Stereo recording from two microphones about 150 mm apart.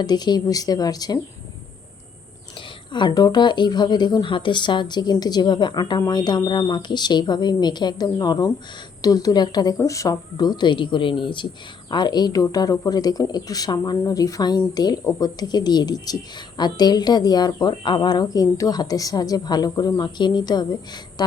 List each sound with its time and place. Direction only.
0.0 s speech: 30° left (ahead or behind)
2.9 s speech: 30° left (ahead or behind)